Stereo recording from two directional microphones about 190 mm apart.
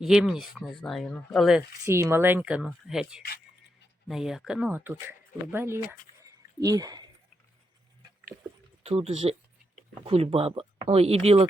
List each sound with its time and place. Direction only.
0.0 s speech: centre (ahead or behind)
1.8 s speech: 15° right (ahead or behind)
8.8 s speech: 30° right (ahead or behind)